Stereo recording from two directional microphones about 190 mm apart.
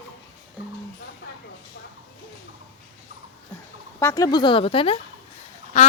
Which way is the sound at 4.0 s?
15° left (ahead or behind).